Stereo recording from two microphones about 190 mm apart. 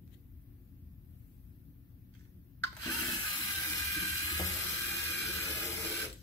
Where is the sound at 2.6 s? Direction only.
15° left (ahead or behind).